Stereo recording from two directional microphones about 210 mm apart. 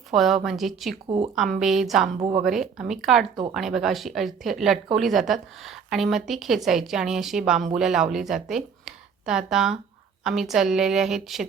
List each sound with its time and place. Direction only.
0.1 s a woman's voice: centre (ahead or behind)
1.0 s speech: 25° right (ahead or behind)
1.4 s a woman's voice: centre (ahead or behind)
8.1 s a sound: centre (ahead or behind)
9.5 s a woman's voice: centre (ahead or behind)